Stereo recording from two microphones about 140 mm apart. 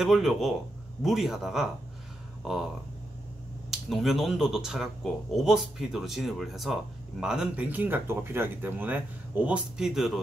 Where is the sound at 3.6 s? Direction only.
Centre (ahead or behind).